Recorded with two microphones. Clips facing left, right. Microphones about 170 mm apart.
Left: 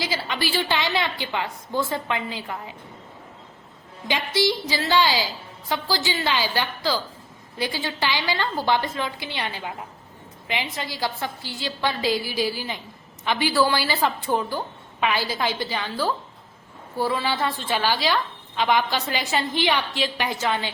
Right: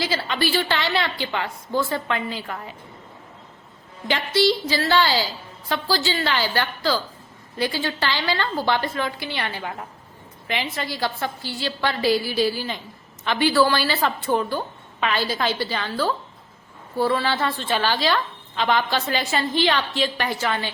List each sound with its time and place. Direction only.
0.0 s a woman's voice: 15° left (ahead or behind)
4.1 s a woman's voice: 15° left (ahead or behind)